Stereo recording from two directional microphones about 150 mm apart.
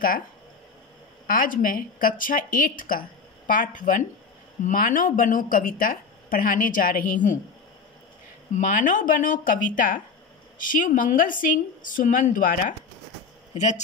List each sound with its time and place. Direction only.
1.2 s a woman's voice: 65° left (ahead or behind)
8.5 s a woman's voice: 60° left (ahead or behind)